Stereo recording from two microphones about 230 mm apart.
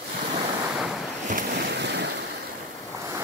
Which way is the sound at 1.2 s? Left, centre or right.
Right.